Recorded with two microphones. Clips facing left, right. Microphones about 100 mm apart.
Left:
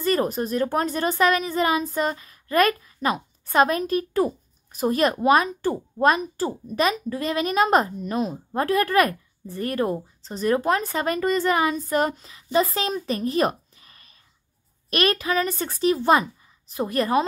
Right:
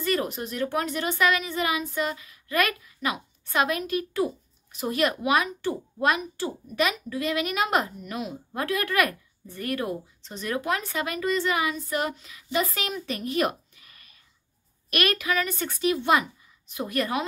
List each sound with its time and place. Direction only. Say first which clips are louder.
0.0 s speech: left 5 dB; 35° left (ahead or behind)